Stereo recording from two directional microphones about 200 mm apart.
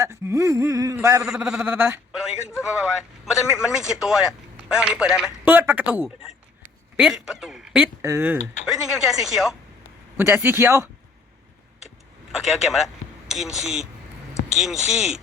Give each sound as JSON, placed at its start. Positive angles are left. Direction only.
{"t": 0.0, "sound": "a man's voice", "side_deg": -15}
{"t": 1.2, "sound": "a man's voice", "side_deg": -5}
{"t": 8.6, "sound": "a man's voice", "side_deg": 0}
{"t": 12.4, "sound": "speech", "side_deg": 0}